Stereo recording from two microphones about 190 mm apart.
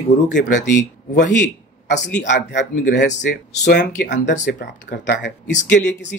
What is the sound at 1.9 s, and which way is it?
Speech, 65° left (ahead or behind).